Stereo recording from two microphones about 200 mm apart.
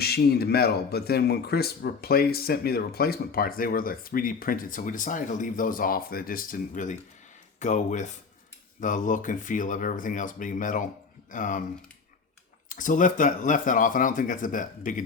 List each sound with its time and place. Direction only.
0.0 s speech: 50° left (ahead or behind)
12.6 s speech: 40° left (ahead or behind)